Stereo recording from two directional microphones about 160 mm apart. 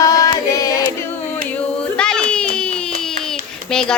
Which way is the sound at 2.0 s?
5° left (ahead or behind).